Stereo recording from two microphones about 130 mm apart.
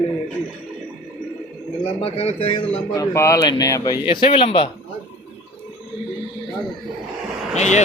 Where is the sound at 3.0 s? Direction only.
25° left (ahead or behind).